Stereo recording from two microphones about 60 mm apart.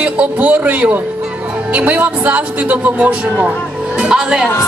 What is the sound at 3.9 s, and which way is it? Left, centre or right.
Speech, centre.